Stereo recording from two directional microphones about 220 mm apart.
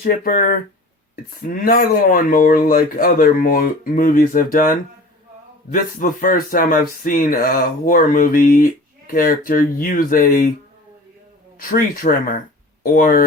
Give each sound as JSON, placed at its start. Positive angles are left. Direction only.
{"t": 0.0, "sound": "speech", "side_deg": 40}
{"t": 11.7, "sound": "speech", "side_deg": 40}